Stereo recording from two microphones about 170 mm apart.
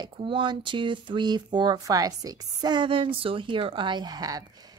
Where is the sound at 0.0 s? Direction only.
30° right (ahead or behind).